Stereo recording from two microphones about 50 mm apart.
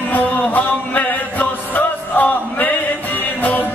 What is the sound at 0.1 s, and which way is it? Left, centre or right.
Music, left.